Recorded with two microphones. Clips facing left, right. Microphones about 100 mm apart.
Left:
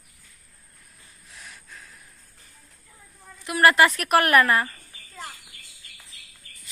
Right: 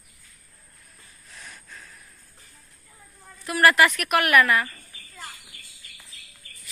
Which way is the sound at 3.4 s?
25° left (ahead or behind).